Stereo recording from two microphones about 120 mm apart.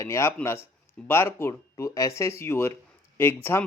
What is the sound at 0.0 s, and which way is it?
A man's voice, 25° left (ahead or behind).